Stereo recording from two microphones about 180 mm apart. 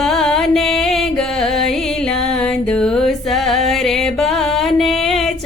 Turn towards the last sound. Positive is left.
turn(degrees=0)  # may be behind; listen again after turning